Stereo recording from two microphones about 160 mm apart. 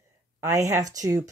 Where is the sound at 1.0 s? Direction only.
20° right (ahead or behind).